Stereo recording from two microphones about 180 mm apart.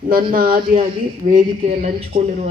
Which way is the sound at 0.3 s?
50° right (ahead or behind).